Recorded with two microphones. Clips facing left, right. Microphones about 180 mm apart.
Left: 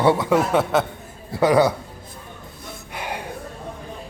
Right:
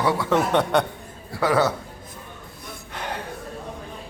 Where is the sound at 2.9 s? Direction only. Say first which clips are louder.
Left 1 dB; 10° left (ahead or behind).